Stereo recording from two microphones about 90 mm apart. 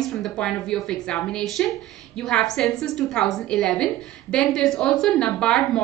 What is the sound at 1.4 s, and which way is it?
A woman's voice, centre (ahead or behind).